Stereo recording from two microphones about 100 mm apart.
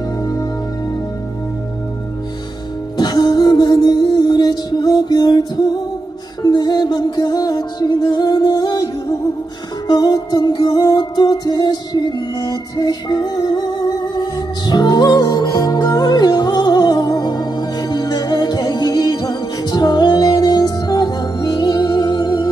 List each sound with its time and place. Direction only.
0.2 s music: 40° left (ahead or behind)
3.0 s music: 45° left (ahead or behind)